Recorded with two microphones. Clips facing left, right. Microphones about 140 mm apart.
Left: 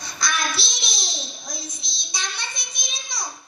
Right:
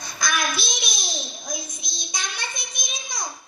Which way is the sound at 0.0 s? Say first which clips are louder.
Right 1 dB; 45° right (ahead or behind).